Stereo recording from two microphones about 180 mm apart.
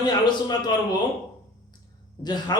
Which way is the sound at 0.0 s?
25° left (ahead or behind).